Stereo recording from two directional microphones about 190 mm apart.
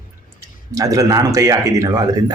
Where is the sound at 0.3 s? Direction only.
15° right (ahead or behind).